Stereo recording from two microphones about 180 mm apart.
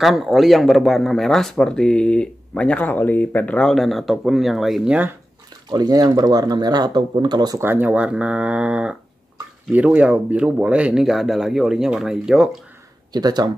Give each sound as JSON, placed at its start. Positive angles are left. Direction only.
{"t": 0.0, "sound": "speech", "side_deg": 0}
{"t": 5.7, "sound": "speech", "side_deg": -20}
{"t": 13.1, "sound": "speech", "side_deg": -20}